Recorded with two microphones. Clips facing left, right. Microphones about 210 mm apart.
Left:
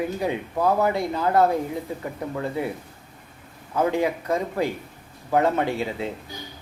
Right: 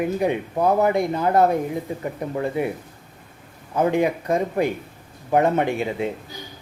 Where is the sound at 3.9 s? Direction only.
20° right (ahead or behind).